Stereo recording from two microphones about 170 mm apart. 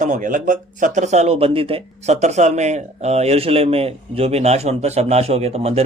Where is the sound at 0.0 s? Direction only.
50° right (ahead or behind).